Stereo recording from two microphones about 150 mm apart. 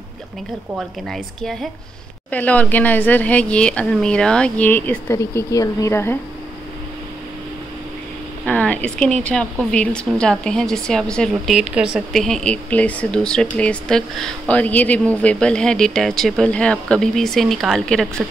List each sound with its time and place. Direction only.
0.7 s a woman's voice: centre (ahead or behind); by 6.1 s 15° left (ahead or behind)
8.5 s a woman's voice: 10° left (ahead or behind)